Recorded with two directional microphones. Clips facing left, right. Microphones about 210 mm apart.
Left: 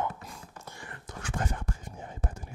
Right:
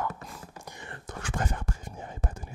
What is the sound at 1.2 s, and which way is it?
Whispering, 90° right.